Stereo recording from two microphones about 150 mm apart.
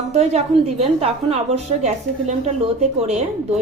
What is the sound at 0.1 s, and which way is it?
A woman's voice, 45° right (ahead or behind).